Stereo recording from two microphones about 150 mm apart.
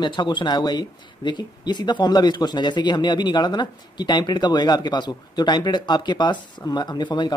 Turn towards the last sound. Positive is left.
turn(degrees=30)  # may be behind; listen again after turning